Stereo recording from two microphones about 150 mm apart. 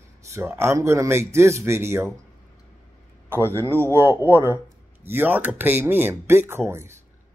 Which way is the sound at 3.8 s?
15° right (ahead or behind).